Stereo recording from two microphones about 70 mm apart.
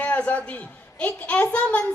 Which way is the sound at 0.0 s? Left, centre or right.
Left.